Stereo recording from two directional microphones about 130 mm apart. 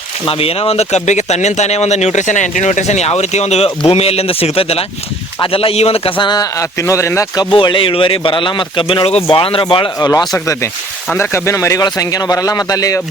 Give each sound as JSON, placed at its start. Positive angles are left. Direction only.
{"t": 0.3, "sound": "speech", "side_deg": 45}
{"t": 7.5, "sound": "speech", "side_deg": 40}
{"t": 10.1, "sound": "speech", "side_deg": 25}